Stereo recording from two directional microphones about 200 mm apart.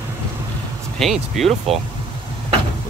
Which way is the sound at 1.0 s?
Centre (ahead or behind).